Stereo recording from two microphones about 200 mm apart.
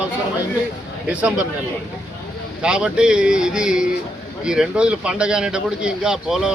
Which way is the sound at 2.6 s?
5° right (ahead or behind).